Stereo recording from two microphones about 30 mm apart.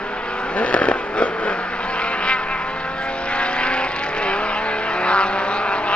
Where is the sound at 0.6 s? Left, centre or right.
Left.